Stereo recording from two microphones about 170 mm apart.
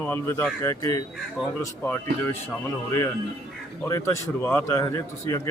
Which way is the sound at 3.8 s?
15° left (ahead or behind).